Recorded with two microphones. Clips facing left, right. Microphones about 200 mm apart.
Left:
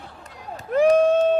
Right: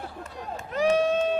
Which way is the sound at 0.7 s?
55° left (ahead or behind).